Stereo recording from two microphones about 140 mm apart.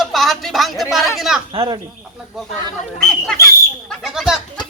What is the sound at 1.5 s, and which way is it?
Speech, 40° right (ahead or behind).